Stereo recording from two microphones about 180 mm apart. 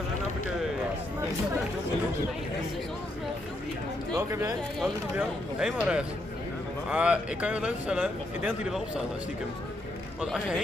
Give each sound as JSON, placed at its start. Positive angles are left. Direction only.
{"t": 4.1, "sound": "speech", "side_deg": -20}
{"t": 4.7, "sound": "speech", "side_deg": 0}
{"t": 10.2, "sound": "speech", "side_deg": -5}